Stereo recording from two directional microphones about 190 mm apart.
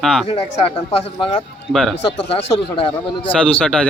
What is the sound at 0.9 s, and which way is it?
Speech, 30° left (ahead or behind).